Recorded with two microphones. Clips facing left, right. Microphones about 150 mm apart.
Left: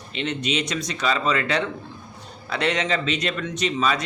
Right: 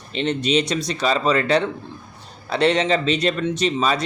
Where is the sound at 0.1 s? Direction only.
35° right (ahead or behind).